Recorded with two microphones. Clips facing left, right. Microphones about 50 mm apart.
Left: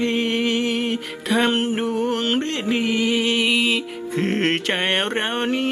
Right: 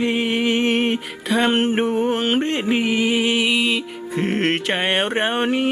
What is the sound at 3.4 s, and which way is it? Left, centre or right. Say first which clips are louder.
Music: even; centre.